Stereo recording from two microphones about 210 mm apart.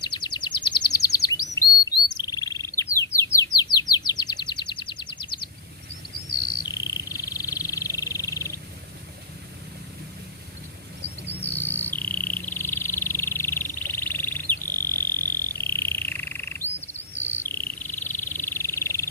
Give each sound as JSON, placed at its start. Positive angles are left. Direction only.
{"t": 0.0, "sound": "chirp", "side_deg": 20}
{"t": 1.5, "sound": "bird", "side_deg": 20}
{"t": 3.3, "sound": "chirp", "side_deg": 15}
{"t": 6.6, "sound": "a sound", "side_deg": 20}
{"t": 11.3, "sound": "cricket", "side_deg": 10}
{"t": 14.7, "sound": "frog", "side_deg": 10}
{"t": 17.7, "sound": "a sound", "side_deg": 10}